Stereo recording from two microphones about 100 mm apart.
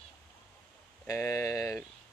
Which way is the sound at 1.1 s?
30° left (ahead or behind).